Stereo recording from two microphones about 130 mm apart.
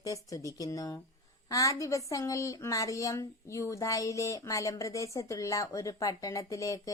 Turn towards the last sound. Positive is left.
turn(degrees=25)  # may be behind; listen again after turning